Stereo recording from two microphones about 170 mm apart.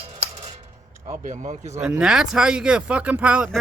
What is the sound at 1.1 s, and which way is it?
Speech, 50° right (ahead or behind).